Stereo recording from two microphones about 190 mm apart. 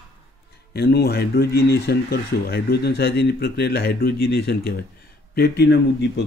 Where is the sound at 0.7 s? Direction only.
55° left (ahead or behind).